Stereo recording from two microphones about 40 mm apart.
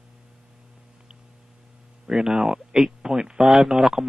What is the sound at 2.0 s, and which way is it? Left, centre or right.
Speech, centre.